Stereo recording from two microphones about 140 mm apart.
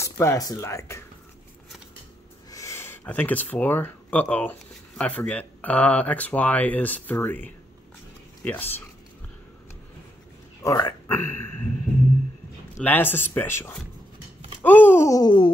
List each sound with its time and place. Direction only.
0.0 s speech: 20° left (ahead or behind)
2.5 s speech: 20° left (ahead or behind)
10.6 s speech: 20° left (ahead or behind)
12.8 s speech: 15° left (ahead or behind)
14.6 s a sound: 15° left (ahead or behind); by 15.5 s 30° left (ahead or behind)